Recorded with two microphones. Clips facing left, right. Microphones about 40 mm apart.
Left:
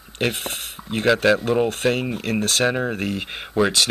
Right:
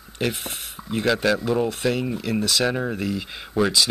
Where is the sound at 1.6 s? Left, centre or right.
Left.